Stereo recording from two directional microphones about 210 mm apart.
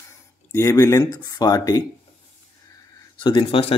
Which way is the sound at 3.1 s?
20° left (ahead or behind).